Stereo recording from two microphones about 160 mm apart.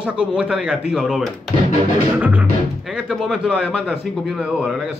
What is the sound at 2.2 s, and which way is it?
Music, 10° right (ahead or behind).